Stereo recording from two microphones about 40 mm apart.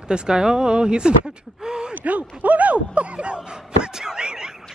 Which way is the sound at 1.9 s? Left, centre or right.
Right.